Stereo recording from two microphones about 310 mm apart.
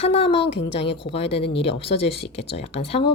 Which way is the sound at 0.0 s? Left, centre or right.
Centre.